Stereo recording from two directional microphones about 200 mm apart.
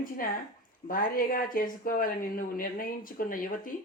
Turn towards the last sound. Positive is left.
turn(degrees=45)  # may be behind; listen again after turning